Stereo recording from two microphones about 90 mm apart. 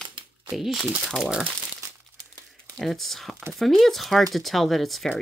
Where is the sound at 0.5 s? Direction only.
5° right (ahead or behind).